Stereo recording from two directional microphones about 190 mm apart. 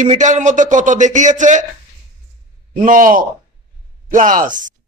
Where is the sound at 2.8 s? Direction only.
45° right (ahead or behind).